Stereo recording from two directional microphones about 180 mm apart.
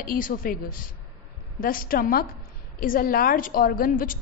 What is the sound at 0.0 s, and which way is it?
A woman's voice, 50° left (ahead or behind).